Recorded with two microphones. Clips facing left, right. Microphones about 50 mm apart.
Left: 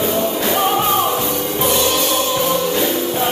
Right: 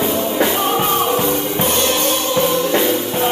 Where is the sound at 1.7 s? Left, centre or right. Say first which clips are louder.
Left 1 dB; right.